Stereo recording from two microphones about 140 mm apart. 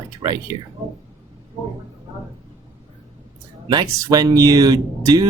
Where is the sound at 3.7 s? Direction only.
30° right (ahead or behind).